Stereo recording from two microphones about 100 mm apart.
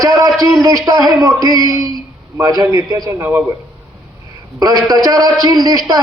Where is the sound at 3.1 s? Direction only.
25° right (ahead or behind).